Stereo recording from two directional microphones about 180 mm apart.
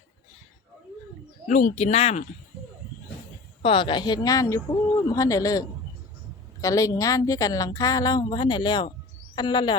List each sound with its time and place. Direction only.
1.5 s speech: 45° left (ahead or behind)
3.6 s a woman's voice: 30° left (ahead or behind)